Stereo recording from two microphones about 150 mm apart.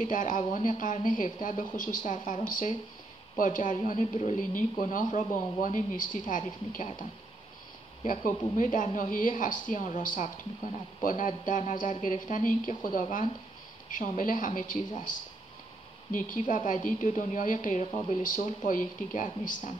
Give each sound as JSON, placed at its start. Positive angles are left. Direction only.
{"t": 0.0, "sound": "speech", "side_deg": 60}
{"t": 8.1, "sound": "speech", "side_deg": 60}
{"t": 16.1, "sound": "speech", "side_deg": 60}